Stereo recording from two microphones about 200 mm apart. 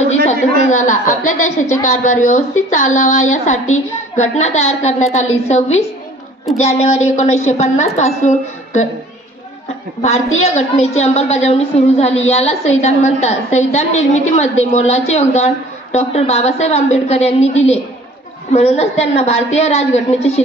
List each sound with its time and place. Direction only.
0.0 s a woman's voice: 35° left (ahead or behind)
10.4 s a woman's voice: 30° left (ahead or behind)
18.5 s a woman's voice: 35° left (ahead or behind)